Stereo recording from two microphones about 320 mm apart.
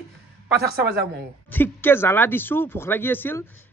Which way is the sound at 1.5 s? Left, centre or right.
Centre.